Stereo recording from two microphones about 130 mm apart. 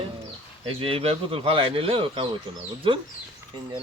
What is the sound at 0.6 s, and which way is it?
Speech, 45° right (ahead or behind).